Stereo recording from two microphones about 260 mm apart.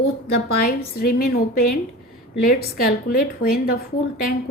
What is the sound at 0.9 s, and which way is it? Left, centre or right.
A woman's voice, left.